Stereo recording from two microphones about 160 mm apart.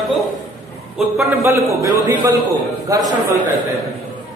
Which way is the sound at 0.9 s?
15° right (ahead or behind).